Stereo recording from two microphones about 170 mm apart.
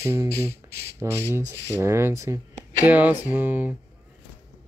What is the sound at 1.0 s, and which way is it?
Speech, 15° right (ahead or behind).